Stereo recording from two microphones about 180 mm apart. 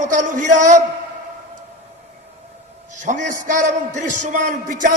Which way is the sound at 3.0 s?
45° right (ahead or behind).